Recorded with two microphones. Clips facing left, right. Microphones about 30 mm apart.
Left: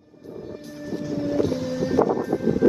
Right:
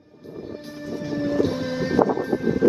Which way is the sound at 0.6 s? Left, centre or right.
Right.